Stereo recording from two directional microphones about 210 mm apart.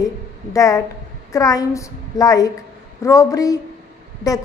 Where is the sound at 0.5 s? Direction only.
15° left (ahead or behind).